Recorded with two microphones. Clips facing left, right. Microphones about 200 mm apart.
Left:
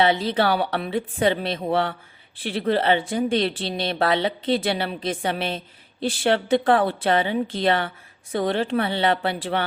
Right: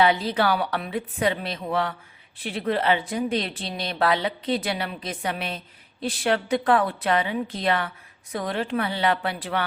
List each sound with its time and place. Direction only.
0.0 s speech: 25° left (ahead or behind)